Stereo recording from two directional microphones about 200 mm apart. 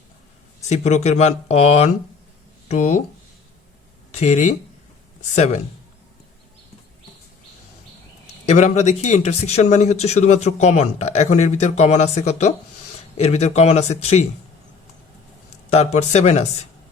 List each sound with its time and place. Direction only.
0.7 s speech: 35° left (ahead or behind)
4.1 s speech: 35° left (ahead or behind)
8.4 s speech: 35° left (ahead or behind)
16.0 s speech: 35° left (ahead or behind)